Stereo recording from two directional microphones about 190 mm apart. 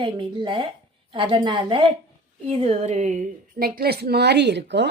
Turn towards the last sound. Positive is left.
turn(degrees=-65)  # may be behind; listen again after turning